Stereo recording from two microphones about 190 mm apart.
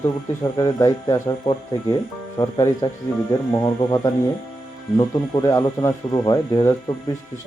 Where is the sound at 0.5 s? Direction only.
20° left (ahead or behind).